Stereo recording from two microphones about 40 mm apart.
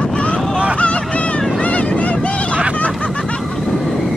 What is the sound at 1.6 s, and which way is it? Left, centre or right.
Vehicle, left.